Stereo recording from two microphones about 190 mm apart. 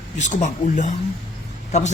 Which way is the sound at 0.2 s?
40° left (ahead or behind).